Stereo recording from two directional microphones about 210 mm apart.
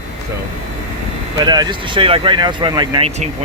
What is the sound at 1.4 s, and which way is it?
Speech, 20° right (ahead or behind).